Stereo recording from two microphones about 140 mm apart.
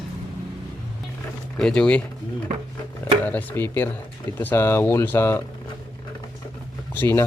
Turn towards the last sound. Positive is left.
turn(degrees=15)  # may be behind; listen again after turning